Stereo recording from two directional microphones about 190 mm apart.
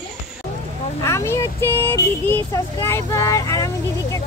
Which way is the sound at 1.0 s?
15° left (ahead or behind).